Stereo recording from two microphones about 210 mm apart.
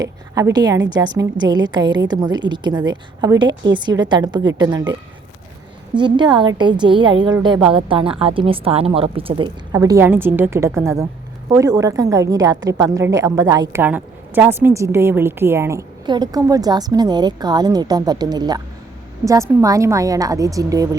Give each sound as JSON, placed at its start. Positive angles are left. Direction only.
{"t": 0.0, "sound": "a woman's voice", "side_deg": -15}
{"t": 5.9, "sound": "a woman's voice", "side_deg": -20}